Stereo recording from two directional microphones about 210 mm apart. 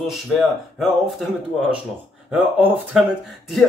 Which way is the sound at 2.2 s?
5° right (ahead or behind).